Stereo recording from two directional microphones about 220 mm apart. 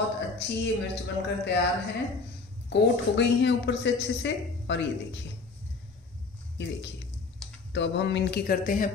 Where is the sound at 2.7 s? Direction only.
55° left (ahead or behind).